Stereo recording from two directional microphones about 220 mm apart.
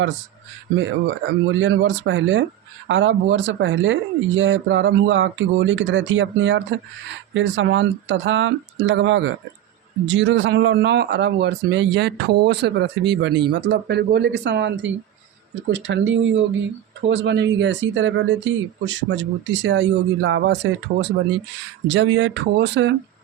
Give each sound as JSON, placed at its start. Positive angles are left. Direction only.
{"t": 0.8, "sound": "speech", "side_deg": -60}